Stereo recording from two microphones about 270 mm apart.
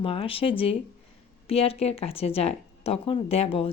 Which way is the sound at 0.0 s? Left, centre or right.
Centre.